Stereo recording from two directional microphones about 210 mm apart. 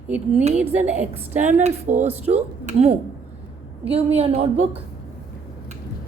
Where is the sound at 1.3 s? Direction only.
35° right (ahead or behind).